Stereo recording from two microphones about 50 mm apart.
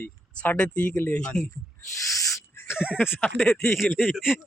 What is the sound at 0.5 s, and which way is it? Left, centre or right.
Speech, left.